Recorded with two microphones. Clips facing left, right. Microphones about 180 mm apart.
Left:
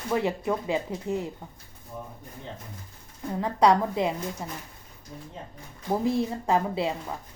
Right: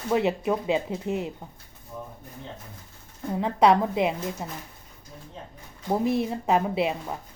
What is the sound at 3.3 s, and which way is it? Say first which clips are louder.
Speech: right 1 dB; 20° right (ahead or behind).